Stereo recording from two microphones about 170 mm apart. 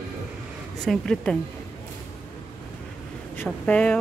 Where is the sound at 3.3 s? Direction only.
10° left (ahead or behind).